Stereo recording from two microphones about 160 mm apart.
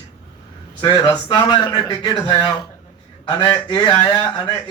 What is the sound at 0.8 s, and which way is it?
A man's voice, 25° left (ahead or behind).